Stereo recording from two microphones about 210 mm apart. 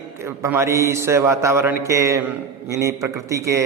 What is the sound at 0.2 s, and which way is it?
Mantra, 10° right (ahead or behind).